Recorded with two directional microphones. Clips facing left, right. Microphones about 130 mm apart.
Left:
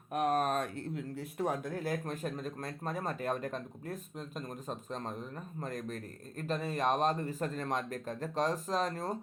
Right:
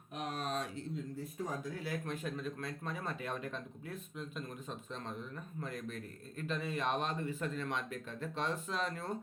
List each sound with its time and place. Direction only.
0.1 s speech: 55° left (ahead or behind); by 1.7 s 75° left (ahead or behind)
1.7 s speech: 45° left (ahead or behind)